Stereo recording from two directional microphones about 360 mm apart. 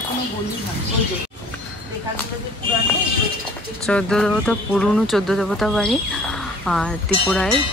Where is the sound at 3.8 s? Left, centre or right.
Centre.